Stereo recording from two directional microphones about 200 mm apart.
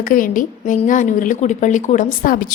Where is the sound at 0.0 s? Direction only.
40° left (ahead or behind).